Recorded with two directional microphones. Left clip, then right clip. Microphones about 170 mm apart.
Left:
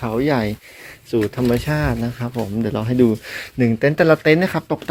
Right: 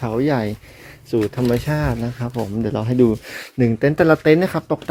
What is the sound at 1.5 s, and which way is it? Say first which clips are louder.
Speech: left 1 dB; 20° right (ahead or behind).